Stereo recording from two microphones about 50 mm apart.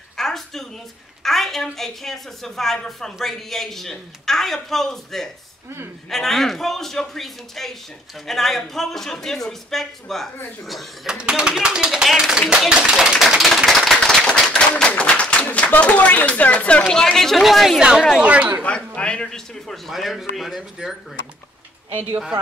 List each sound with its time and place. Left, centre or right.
0.2 s a sound: centre
1.2 s a woman's voice: centre
11.1 s speech: centre
13.7 s a sound: centre
14.2 s a sound: centre
14.9 s a sound: left
15.5 s speech: left
16.9 s a woman's voice: centre
17.7 s speech: centre
18.2 s speech: right
18.9 s speech: centre
19.9 s a woman's voice: centre